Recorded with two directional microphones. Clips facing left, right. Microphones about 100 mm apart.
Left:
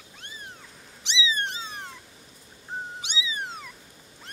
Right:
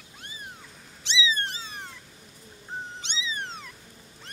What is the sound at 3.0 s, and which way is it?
Cat, 10° left (ahead or behind).